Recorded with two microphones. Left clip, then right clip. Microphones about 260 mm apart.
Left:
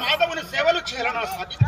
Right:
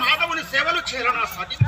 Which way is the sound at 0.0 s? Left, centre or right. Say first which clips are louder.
Right 2 dB; centre.